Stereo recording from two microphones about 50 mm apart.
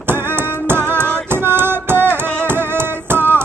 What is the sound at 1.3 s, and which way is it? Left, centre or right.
Music, right.